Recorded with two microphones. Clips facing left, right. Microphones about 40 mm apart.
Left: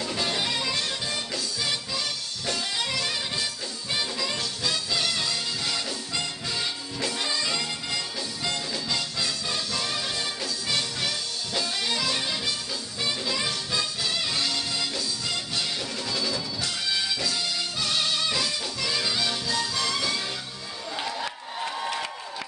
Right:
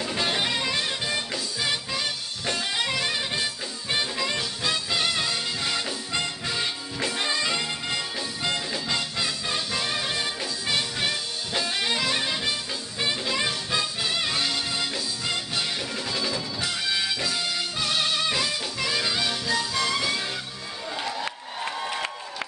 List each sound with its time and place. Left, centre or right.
0.0 s music: right
21.0 s crowd: centre